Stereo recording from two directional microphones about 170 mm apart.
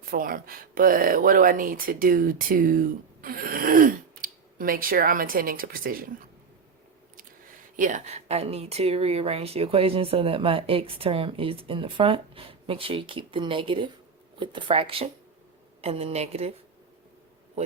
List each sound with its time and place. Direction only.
0.0 s speech: 55° right (ahead or behind)
7.8 s speech: 50° right (ahead or behind)